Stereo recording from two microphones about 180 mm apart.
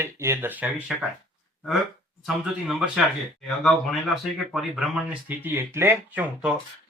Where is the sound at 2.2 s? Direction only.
Centre (ahead or behind).